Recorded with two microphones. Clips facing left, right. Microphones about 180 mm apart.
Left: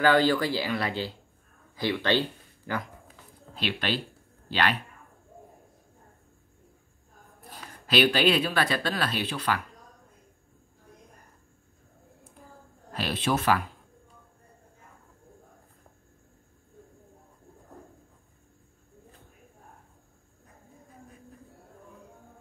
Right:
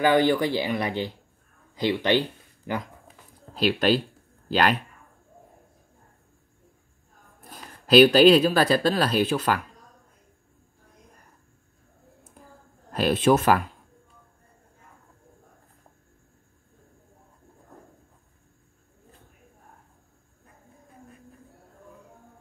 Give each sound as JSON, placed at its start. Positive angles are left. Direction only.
{"t": 0.0, "sound": "speech", "side_deg": -20}
{"t": 3.5, "sound": "speech", "side_deg": -40}
{"t": 7.8, "sound": "speech", "side_deg": -40}
{"t": 12.9, "sound": "speech", "side_deg": -45}